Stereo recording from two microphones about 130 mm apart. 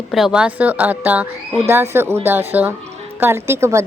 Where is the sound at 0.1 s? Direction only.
5° right (ahead or behind).